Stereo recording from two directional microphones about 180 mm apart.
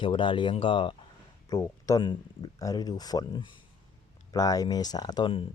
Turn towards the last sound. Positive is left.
turn(degrees=30)  # may be behind; listen again after turning